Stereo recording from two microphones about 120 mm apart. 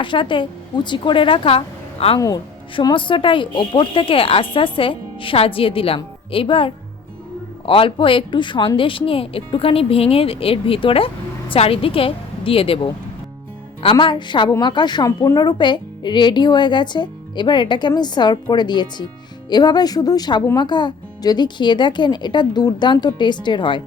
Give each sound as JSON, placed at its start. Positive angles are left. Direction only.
{"t": 0.0, "sound": "speech", "side_deg": 45}
{"t": 2.1, "sound": "speech", "side_deg": 30}
{"t": 2.9, "sound": "a woman's voice", "side_deg": 45}
{"t": 14.0, "sound": "speech", "side_deg": 40}